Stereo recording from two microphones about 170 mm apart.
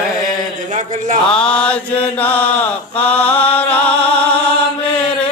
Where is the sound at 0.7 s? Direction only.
45° right (ahead or behind).